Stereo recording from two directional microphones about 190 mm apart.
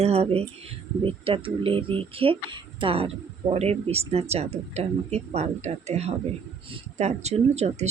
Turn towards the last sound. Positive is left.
turn(degrees=-35)  # may be behind; listen again after turning